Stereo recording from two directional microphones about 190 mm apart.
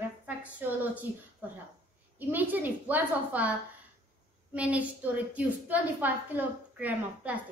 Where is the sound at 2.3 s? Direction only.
10° right (ahead or behind).